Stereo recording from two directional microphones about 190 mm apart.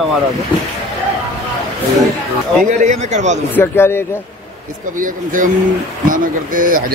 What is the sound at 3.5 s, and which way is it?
Speech, 10° left (ahead or behind).